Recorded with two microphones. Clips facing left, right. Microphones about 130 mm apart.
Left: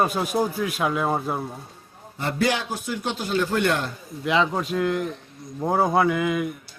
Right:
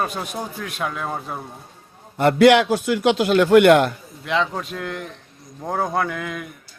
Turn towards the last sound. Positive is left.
turn(degrees=5)  # may be behind; listen again after turning